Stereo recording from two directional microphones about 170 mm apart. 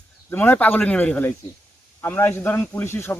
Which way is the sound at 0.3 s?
10° left (ahead or behind).